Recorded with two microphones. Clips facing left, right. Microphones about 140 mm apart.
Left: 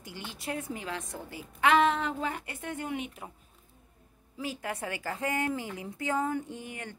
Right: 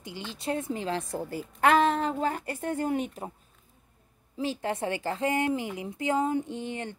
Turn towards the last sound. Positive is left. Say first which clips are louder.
# right 6 dB
turn(degrees=-25)  # may be behind; listen again after turning